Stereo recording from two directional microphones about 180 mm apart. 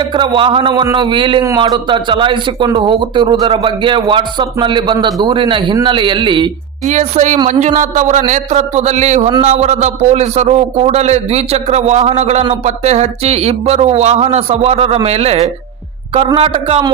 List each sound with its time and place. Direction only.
0.1 s a man's voice: 25° right (ahead or behind)
6.8 s a man's voice: 40° right (ahead or behind)